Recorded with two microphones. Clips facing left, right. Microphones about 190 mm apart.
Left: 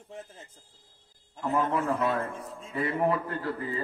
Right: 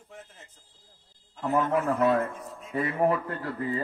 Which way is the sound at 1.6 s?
30° left (ahead or behind).